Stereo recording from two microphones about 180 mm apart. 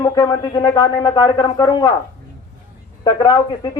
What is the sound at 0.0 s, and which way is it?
A man's voice, 20° left (ahead or behind).